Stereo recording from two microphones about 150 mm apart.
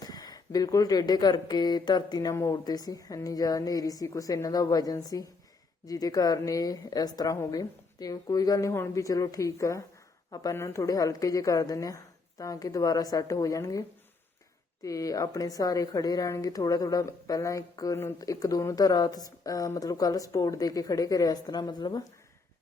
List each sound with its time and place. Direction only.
0.0 s speech: 25° left (ahead or behind)
14.8 s speech: 25° left (ahead or behind)